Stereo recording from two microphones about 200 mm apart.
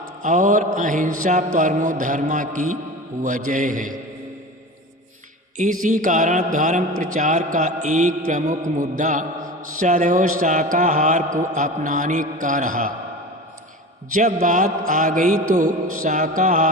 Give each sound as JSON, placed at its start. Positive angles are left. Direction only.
{"t": 0.2, "sound": "a man's voice", "side_deg": -40}
{"t": 5.5, "sound": "a man's voice", "side_deg": -40}
{"t": 14.1, "sound": "a man's voice", "side_deg": -40}